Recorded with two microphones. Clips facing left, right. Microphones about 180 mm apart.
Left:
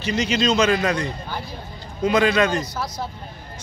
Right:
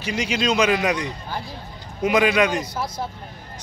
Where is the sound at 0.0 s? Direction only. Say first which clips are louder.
Left 2 dB; 10° right (ahead or behind).